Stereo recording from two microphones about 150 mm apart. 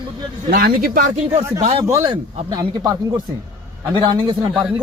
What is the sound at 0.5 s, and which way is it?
Speech, 70° right (ahead or behind).